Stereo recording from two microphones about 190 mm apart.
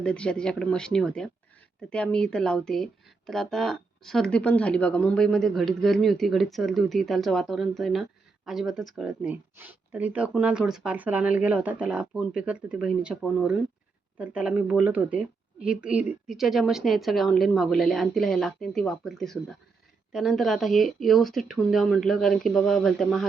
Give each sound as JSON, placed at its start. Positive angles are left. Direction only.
{"t": 0.0, "sound": "speech", "side_deg": 5}